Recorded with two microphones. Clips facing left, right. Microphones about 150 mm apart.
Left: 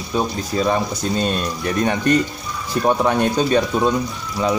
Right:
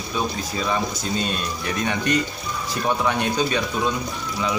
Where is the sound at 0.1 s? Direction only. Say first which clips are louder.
Left 5 dB; 45° left (ahead or behind).